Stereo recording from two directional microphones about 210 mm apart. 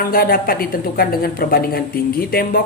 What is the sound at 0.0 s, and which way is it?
A man's voice, 45° left (ahead or behind).